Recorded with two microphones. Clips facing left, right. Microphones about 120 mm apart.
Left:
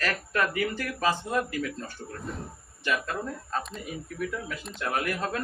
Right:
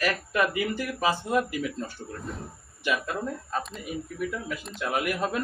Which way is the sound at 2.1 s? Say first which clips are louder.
Left 1 dB; centre (ahead or behind).